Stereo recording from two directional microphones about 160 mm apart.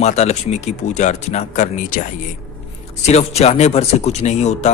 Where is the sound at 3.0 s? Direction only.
40° left (ahead or behind).